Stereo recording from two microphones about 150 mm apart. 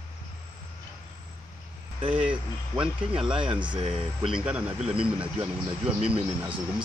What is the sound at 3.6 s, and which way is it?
Speech, 40° right (ahead or behind).